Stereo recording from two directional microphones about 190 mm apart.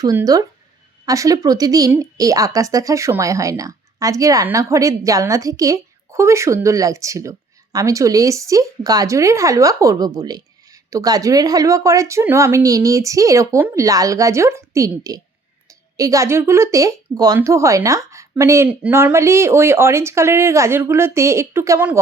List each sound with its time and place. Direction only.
0.0 s speech: 20° right (ahead or behind)